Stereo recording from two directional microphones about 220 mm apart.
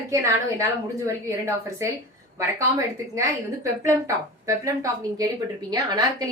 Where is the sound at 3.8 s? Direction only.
15° right (ahead or behind).